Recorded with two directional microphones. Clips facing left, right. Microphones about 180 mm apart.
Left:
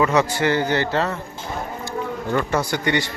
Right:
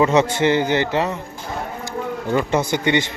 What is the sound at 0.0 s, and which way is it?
Speech, 25° right (ahead or behind).